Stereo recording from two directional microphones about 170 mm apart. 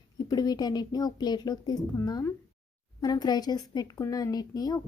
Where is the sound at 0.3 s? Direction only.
25° left (ahead or behind).